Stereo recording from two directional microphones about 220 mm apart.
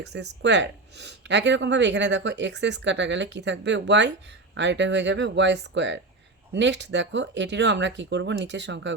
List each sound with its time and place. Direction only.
0.0 s speech: 50° right (ahead or behind)